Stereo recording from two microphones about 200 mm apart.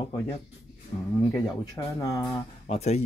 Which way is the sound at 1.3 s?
15° left (ahead or behind).